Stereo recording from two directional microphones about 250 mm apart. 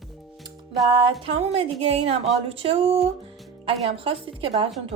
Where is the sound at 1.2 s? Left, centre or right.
Right.